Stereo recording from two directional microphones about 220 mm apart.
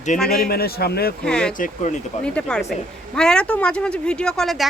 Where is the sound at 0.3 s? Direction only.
45° left (ahead or behind).